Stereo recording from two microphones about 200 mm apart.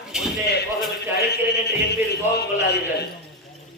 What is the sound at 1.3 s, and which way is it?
Music, 55° left (ahead or behind).